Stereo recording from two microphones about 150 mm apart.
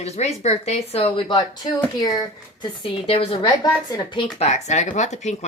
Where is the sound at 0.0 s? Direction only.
45° left (ahead or behind).